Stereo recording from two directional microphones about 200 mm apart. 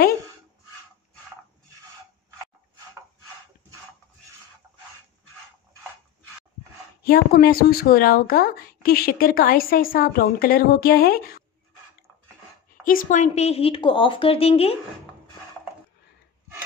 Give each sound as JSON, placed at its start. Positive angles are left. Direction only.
{"t": 7.0, "sound": "speech", "side_deg": 50}
{"t": 12.8, "sound": "a woman's voice", "side_deg": 40}